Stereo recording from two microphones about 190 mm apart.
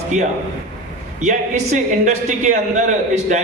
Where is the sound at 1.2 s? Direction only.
40° right (ahead or behind).